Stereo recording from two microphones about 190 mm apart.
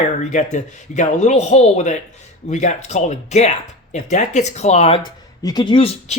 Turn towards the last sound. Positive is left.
turn(degrees=30)  # may be behind; listen again after turning